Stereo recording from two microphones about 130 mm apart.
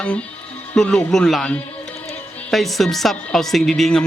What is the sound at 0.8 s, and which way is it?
A woman's voice, 5° left (ahead or behind).